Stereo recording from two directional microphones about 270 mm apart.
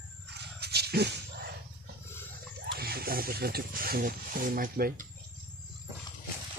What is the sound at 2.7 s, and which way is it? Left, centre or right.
Speech, right.